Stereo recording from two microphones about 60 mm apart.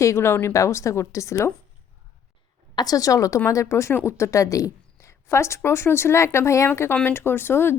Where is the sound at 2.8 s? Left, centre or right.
Left.